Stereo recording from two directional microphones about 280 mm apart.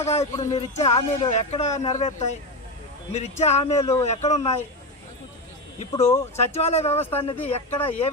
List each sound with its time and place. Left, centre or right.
0.0 s speech: left
5.8 s speech: left